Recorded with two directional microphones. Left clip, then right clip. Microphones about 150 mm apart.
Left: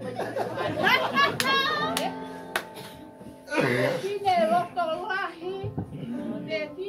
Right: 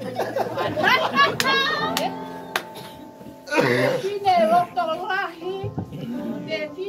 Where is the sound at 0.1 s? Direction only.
60° right (ahead or behind).